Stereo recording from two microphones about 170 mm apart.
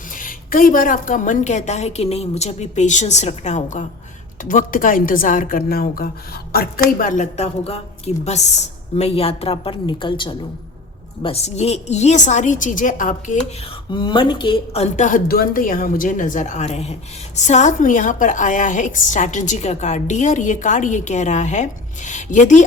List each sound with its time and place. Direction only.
0.2 s a woman's voice: 55° left (ahead or behind)
13.9 s a woman's voice: 25° left (ahead or behind); by 22.6 s 45° left (ahead or behind)